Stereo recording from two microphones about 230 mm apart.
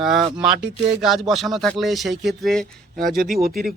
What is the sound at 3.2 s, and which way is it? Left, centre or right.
Speech, right.